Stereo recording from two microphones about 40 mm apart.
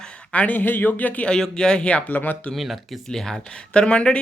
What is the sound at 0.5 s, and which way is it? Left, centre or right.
Speech, left.